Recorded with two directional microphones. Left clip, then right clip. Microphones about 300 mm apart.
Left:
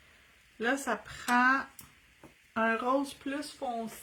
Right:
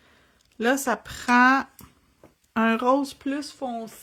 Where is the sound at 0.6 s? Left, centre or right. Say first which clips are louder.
Right 8 dB; right.